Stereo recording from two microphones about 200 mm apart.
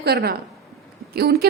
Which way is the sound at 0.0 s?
55° right (ahead or behind).